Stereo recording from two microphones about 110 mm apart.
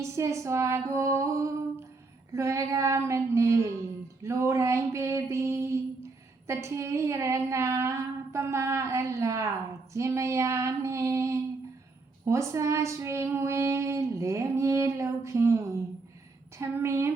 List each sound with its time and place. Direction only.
0.0 s speech: 25° right (ahead or behind)
16.6 s speech: 25° right (ahead or behind)